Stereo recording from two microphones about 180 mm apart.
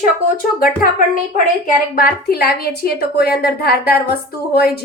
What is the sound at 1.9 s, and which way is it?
A woman's voice, 55° left (ahead or behind).